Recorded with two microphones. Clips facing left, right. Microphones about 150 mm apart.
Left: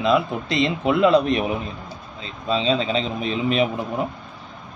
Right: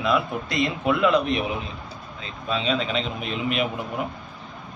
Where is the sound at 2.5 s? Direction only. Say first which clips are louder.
Left 4 dB; 30° left (ahead or behind).